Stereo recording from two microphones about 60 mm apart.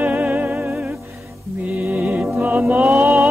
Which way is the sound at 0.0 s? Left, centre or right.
Right.